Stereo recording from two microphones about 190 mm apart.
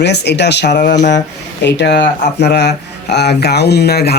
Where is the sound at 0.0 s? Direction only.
65° left (ahead or behind).